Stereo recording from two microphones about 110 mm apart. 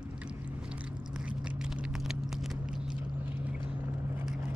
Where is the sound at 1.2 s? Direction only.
10° right (ahead or behind).